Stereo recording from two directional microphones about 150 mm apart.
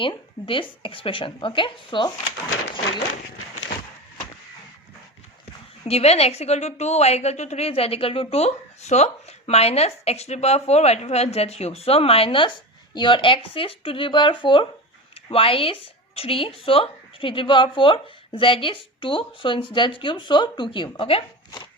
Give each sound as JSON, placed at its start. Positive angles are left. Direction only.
{"t": 0.0, "sound": "a woman's voice", "side_deg": 35}
{"t": 5.9, "sound": "a woman's voice", "side_deg": 45}